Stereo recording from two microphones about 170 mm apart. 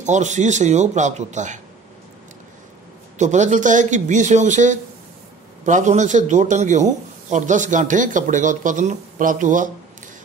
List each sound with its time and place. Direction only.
0.0 s a man's voice: 45° right (ahead or behind)
3.2 s a man's voice: 45° right (ahead or behind)